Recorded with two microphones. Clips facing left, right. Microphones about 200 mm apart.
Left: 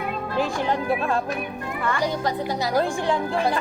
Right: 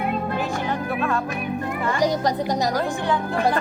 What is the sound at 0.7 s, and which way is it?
Music, 30° left (ahead or behind).